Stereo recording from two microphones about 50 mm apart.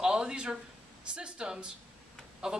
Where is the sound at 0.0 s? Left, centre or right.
Centre.